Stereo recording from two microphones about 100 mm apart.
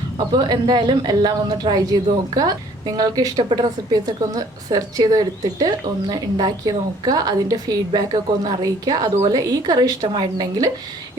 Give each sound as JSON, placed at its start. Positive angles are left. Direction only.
{"t": 0.3, "sound": "speech", "side_deg": -45}